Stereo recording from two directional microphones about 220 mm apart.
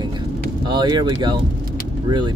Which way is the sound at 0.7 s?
20° right (ahead or behind).